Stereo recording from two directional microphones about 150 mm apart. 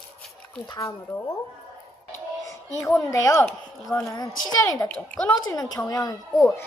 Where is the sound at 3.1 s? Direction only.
20° left (ahead or behind).